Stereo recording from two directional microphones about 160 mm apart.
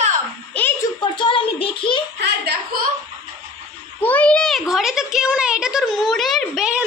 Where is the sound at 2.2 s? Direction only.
90° right.